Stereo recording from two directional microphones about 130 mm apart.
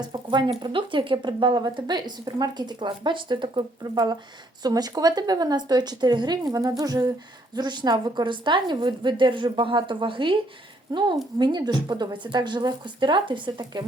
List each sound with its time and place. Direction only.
0.0 s a woman's voice: 35° right (ahead or behind)